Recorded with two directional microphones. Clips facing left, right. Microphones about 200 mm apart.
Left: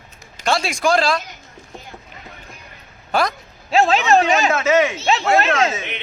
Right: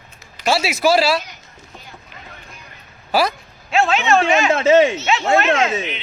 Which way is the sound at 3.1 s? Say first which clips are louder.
Right 2 dB; 5° right (ahead or behind).